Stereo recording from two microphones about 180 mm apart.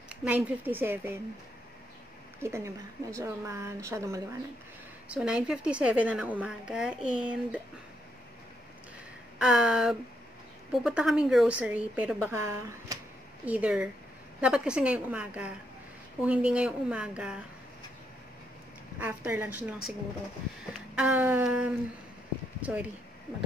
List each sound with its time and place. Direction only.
0.1 s a woman's voice: 10° right (ahead or behind)
2.4 s a woman's voice: 15° right (ahead or behind)
5.0 s a woman's voice: 5° right (ahead or behind)
9.4 s a woman's voice: 5° right (ahead or behind)
13.5 s a woman's voice: 5° right (ahead or behind)
18.9 s a woman's voice: 10° right (ahead or behind)
20.9 s a woman's voice: 5° right (ahead or behind)